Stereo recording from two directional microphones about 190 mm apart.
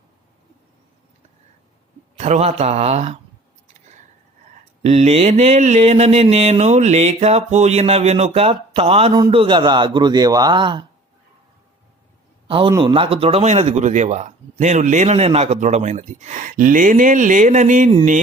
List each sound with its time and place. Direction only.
2.1 s speech: 35° right (ahead or behind)
4.8 s a man's voice: 35° right (ahead or behind)
12.5 s a man's voice: 30° right (ahead or behind)